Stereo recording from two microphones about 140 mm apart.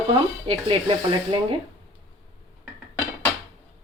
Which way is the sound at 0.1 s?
40° right (ahead or behind).